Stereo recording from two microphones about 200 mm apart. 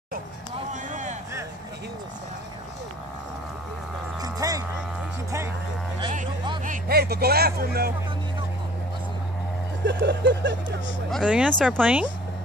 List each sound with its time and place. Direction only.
0.8 s a sound: 40° right (ahead or behind)
4.2 s a sound: 20° right (ahead or behind)
6.6 s speech: 45° right (ahead or behind)
9.8 s speech: 60° right (ahead or behind)
11.1 s speech: centre (ahead or behind)
11.8 s speech: 5° right (ahead or behind)